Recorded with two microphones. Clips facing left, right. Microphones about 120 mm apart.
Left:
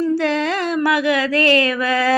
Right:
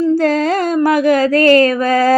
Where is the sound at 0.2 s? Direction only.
45° right (ahead or behind).